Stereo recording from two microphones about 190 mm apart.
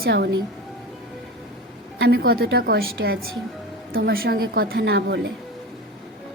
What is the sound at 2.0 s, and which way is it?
A woman's voice, 60° right (ahead or behind).